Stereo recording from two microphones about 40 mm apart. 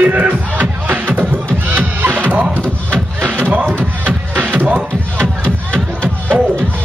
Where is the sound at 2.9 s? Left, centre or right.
Right.